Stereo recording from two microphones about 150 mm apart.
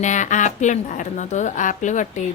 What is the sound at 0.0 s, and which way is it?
A woman's voice, 55° left (ahead or behind).